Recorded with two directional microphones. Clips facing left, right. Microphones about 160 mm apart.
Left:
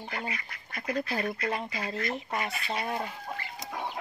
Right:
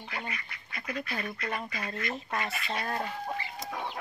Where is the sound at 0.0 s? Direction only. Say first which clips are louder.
Left 3 dB; 35° left (ahead or behind).